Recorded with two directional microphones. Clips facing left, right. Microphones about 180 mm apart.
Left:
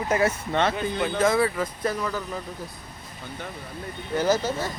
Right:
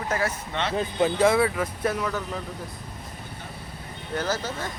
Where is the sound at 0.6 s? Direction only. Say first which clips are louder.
Left 6 dB; 40° left (ahead or behind).